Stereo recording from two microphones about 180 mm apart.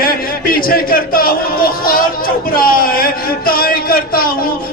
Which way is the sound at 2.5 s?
55° left (ahead or behind).